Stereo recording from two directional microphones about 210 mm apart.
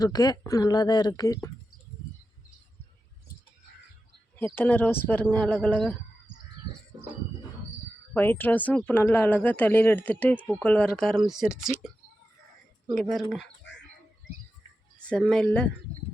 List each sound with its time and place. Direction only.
0.0 s speech: 20° left (ahead or behind)
4.5 s speech: 10° left (ahead or behind)
8.1 s speech: 10° left (ahead or behind)
12.9 s speech: centre (ahead or behind)
15.1 s speech: 5° left (ahead or behind)